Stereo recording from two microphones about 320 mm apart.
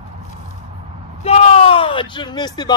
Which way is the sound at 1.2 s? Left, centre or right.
Centre.